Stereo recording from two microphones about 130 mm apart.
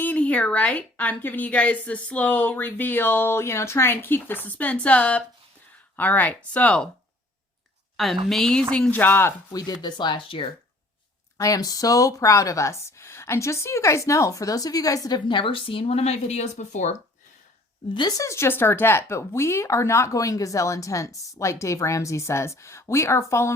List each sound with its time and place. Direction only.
0.0 s a woman's voice: 10° left (ahead or behind)
7.9 s a woman's voice: centre (ahead or behind); by 9.3 s 15° left (ahead or behind)
9.5 s speech: 30° left (ahead or behind)
11.3 s speech: 25° left (ahead or behind); by 16.9 s 65° left (ahead or behind)
17.9 s speech: 35° left (ahead or behind)
18.3 s speech: 20° left (ahead or behind)